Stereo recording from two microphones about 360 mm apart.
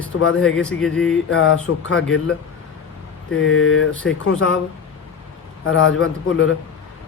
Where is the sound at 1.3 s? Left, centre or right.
Left.